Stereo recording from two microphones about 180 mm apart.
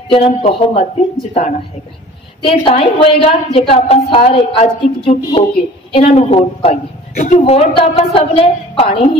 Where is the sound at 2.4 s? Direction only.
30° left (ahead or behind).